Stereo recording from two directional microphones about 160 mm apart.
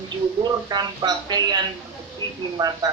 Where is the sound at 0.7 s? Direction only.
25° right (ahead or behind).